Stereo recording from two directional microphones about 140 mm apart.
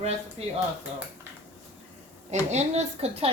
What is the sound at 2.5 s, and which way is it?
Speech, 50° right (ahead or behind).